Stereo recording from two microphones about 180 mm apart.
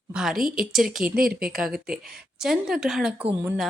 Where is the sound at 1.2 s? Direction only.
55° right (ahead or behind).